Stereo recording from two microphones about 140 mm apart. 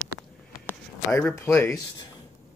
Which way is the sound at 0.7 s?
15° left (ahead or behind).